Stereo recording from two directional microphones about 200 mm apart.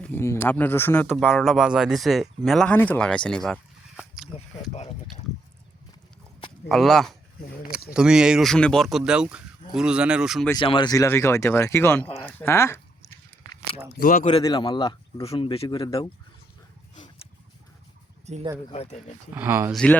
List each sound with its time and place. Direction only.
0.0 s speech: 10° left (ahead or behind)
4.7 s speech: 30° left (ahead or behind)
6.7 s speech: centre (ahead or behind)
10.6 s speech: 25° left (ahead or behind)
14.0 s speech: 45° left (ahead or behind)
14.3 s speech: 25° left (ahead or behind)
18.3 s speech: 35° right (ahead or behind)
18.7 s speech: 30° left (ahead or behind)
19.3 s speech: 10° right (ahead or behind)
19.7 s speech: 5° left (ahead or behind)